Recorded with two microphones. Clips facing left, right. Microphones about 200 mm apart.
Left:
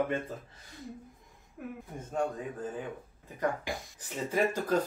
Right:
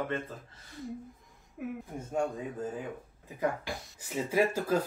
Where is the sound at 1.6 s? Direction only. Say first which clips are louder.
Right 4 dB; 5° right (ahead or behind).